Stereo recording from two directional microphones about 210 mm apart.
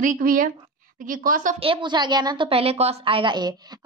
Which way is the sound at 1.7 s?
20° right (ahead or behind).